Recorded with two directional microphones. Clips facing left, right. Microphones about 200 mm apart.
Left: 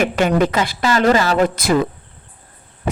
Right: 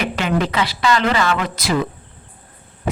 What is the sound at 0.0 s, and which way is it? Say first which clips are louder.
Speech: left 5 dB; 50° left (ahead or behind).